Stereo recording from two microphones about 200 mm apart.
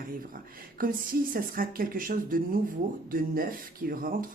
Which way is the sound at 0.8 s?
45° right (ahead or behind).